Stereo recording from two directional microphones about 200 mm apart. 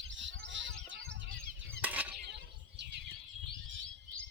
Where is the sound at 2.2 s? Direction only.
55° right (ahead or behind).